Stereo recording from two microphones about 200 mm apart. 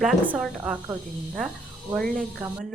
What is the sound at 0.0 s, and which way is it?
Speech, centre (ahead or behind).